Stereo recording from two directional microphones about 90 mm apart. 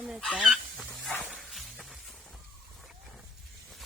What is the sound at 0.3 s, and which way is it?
Speech, centre (ahead or behind).